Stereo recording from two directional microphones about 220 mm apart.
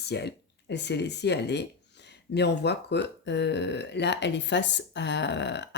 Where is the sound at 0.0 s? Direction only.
50° left (ahead or behind).